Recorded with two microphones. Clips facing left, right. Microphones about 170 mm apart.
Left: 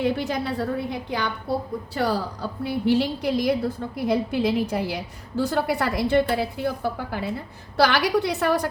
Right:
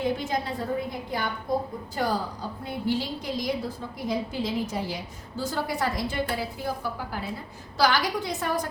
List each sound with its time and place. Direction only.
0.0 s a woman's voice: 70° left (ahead or behind)